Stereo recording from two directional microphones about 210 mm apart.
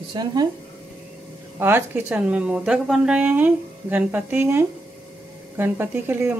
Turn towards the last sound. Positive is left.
turn(degrees=-10)  # may be behind; listen again after turning